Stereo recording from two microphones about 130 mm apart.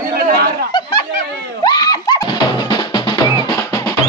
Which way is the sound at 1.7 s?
30° left (ahead or behind).